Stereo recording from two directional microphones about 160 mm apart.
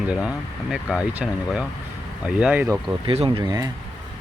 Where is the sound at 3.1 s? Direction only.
35° right (ahead or behind).